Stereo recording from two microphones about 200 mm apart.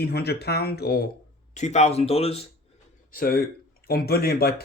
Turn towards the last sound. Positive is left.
turn(degrees=50)  # may be behind; listen again after turning